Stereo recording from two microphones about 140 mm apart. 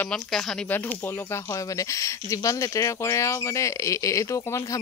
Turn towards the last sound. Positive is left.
turn(degrees=20)  # may be behind; listen again after turning